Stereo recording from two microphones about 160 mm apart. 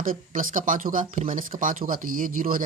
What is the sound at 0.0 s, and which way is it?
Speech, 55° right (ahead or behind).